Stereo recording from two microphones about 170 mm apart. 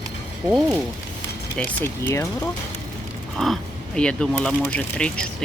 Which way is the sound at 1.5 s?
10° left (ahead or behind).